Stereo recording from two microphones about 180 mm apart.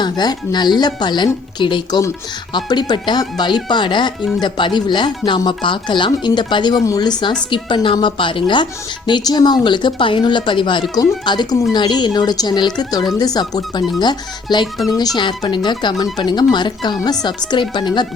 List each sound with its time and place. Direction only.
0.0 s speech: 25° left (ahead or behind)